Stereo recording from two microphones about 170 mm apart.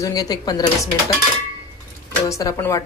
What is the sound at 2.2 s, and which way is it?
Speech, 20° left (ahead or behind).